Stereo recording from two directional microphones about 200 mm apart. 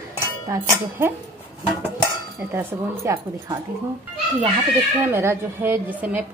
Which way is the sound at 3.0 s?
15° right (ahead or behind).